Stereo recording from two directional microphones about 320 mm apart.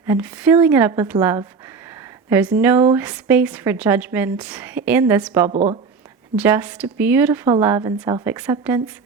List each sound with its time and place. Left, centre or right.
0.0 s a woman's voice: centre
5.5 s speech: right
6.3 s a woman's voice: centre